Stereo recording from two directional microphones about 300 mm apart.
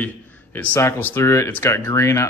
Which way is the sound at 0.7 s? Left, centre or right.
Centre.